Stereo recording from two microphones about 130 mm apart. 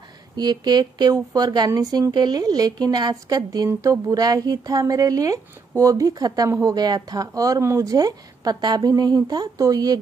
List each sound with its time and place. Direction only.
0.4 s a woman's voice: 35° right (ahead or behind)